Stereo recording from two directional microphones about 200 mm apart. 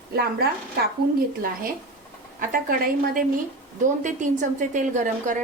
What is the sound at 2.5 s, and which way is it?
A woman's voice, 45° right (ahead or behind).